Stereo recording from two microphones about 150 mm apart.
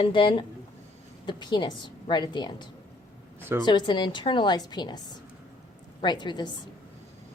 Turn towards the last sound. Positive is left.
turn(degrees=30)  # may be behind; listen again after turning